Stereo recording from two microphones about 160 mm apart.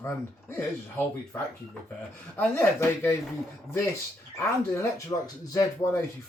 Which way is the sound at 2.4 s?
15° left (ahead or behind).